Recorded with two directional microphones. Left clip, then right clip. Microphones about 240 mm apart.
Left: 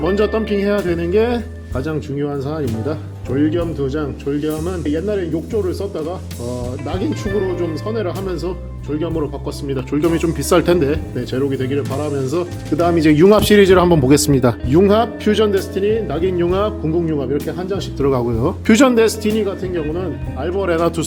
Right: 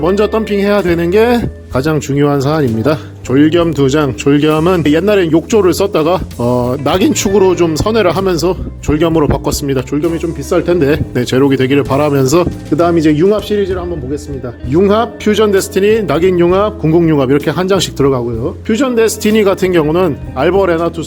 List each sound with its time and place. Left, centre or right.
0.0 s a man's voice: centre
2.8 s speech: right
10.0 s speech: centre
10.8 s speech: right
12.8 s a man's voice: centre
13.1 s speech: centre
13.3 s speech: left
14.7 s a man's voice: centre
17.1 s speech: right
18.4 s speech: centre
19.4 s speech: right